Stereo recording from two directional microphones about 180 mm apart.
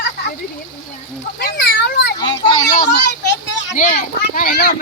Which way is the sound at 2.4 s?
35° left (ahead or behind).